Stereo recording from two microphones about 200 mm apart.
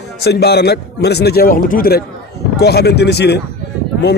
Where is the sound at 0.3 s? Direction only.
55° left (ahead or behind).